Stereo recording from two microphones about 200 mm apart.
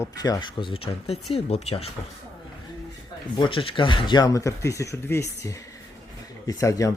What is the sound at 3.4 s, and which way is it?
Speech, 25° left (ahead or behind).